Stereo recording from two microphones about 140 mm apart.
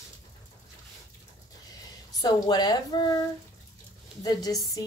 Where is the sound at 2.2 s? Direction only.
30° left (ahead or behind).